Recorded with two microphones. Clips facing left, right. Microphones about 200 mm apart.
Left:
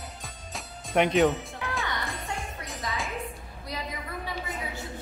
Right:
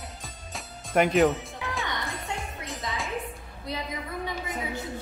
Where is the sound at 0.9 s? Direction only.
Centre (ahead or behind).